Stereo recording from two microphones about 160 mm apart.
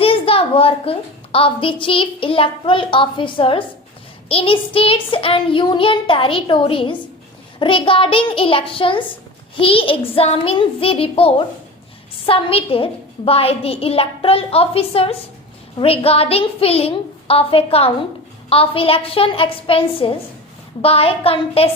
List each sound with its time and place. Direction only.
0.0 s a woman's voice: 35° left (ahead or behind)